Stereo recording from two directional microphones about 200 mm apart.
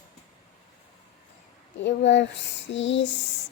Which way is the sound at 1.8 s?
65° left (ahead or behind).